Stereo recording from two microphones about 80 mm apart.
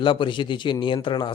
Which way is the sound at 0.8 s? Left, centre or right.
Left.